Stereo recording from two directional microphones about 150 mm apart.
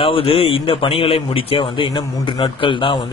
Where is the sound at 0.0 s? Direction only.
40° left (ahead or behind).